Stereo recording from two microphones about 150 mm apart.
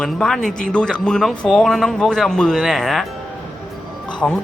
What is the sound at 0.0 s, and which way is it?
Speech, 5° left (ahead or behind).